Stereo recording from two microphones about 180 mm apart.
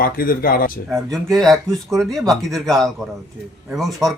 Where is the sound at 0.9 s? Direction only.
Centre (ahead or behind).